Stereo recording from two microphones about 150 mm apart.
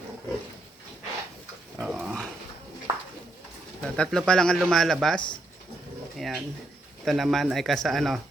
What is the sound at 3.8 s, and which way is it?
Speech, 5° left (ahead or behind).